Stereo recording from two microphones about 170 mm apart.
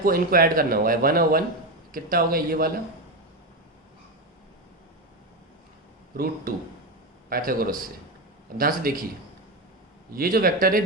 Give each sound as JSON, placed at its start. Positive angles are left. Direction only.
{"t": 0.0, "sound": "speech", "side_deg": -60}
{"t": 6.5, "sound": "speech", "side_deg": -55}
{"t": 10.1, "sound": "speech", "side_deg": -60}